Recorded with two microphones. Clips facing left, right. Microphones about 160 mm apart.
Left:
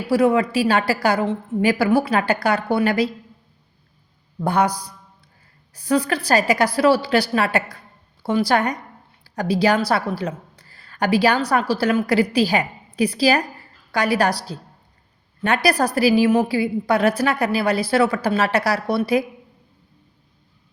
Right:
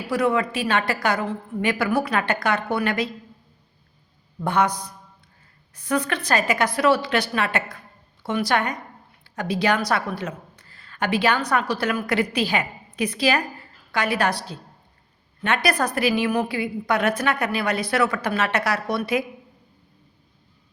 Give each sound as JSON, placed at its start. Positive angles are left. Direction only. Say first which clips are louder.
{"t": 0.1, "sound": "a woman's voice", "louder": "left 5 dB", "side_deg": 30}
{"t": 4.4, "sound": "a woman's voice", "louder": "left 2 dB", "side_deg": 35}